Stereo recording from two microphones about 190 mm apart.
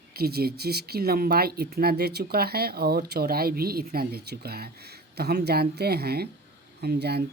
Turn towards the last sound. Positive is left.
turn(degrees=-60)  # may be behind; listen again after turning